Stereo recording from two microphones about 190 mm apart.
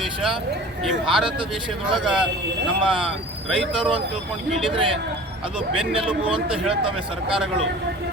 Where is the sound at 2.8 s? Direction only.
25° right (ahead or behind).